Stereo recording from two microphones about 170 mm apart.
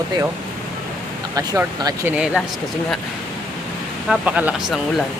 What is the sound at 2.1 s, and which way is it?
Speech, 5° right (ahead or behind).